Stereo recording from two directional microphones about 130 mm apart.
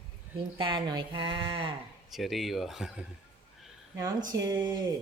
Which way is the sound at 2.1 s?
Centre (ahead or behind).